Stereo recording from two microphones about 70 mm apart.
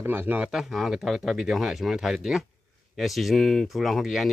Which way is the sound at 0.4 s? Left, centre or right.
Centre.